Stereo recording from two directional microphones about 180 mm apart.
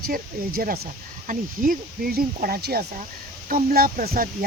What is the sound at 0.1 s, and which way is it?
Speech, 55° right (ahead or behind).